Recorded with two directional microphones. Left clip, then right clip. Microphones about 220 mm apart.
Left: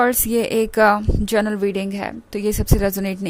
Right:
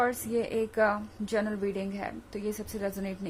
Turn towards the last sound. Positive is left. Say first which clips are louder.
# left 12 dB
turn(degrees=45)  # may be behind; listen again after turning